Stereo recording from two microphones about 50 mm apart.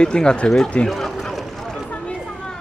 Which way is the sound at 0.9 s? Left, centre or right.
Centre.